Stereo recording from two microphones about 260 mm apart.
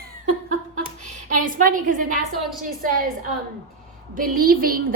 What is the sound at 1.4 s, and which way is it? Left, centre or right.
Speech, right.